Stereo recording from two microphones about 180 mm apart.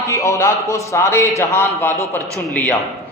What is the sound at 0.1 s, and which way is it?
A woman's voice, 15° left (ahead or behind).